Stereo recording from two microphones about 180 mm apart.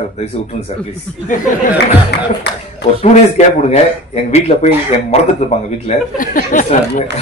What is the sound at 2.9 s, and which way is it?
A man's voice, 40° left (ahead or behind).